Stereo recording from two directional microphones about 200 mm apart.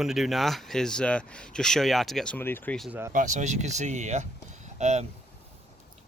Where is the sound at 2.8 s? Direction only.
10° right (ahead or behind).